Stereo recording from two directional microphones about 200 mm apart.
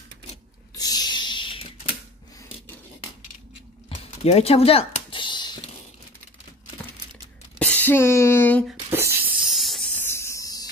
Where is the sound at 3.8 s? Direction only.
30° left (ahead or behind).